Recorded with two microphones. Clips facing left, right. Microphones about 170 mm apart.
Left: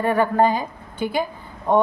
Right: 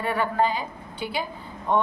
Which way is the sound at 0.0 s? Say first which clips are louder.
Left 6 dB; 45° left (ahead or behind).